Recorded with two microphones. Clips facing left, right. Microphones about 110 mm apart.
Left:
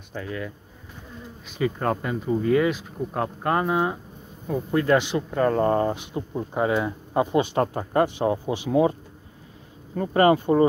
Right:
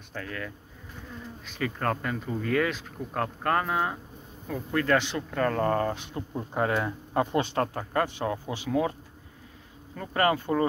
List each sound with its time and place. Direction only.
0.1 s speech: 10° left (ahead or behind)
9.9 s speech: 25° left (ahead or behind)